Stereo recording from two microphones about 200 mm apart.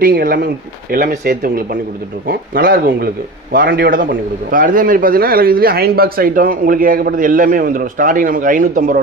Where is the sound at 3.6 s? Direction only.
60° right (ahead or behind).